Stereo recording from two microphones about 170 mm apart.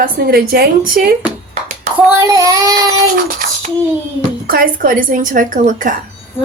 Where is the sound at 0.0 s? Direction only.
65° right (ahead or behind).